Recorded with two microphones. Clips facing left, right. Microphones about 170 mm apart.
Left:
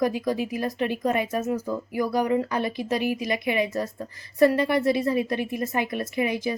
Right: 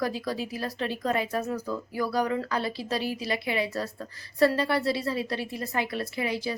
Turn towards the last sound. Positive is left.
turn(degrees=20)  # may be behind; listen again after turning